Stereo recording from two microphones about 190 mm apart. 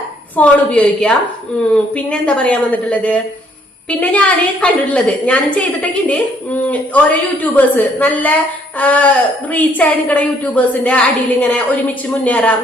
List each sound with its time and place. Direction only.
0.3 s a woman's voice: 5° left (ahead or behind)